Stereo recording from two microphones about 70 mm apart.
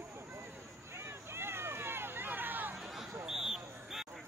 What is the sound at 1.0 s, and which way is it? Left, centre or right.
Vehicle, right.